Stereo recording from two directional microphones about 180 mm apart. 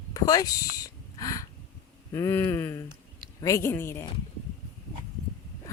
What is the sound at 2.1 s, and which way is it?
Speech, 15° left (ahead or behind).